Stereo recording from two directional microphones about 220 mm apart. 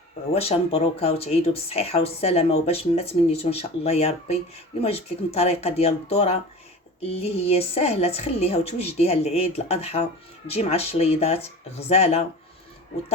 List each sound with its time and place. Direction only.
0.3 s a woman's voice: 25° left (ahead or behind)